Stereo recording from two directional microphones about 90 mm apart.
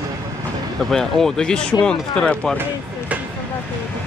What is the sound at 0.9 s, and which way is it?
Speech, 5° left (ahead or behind).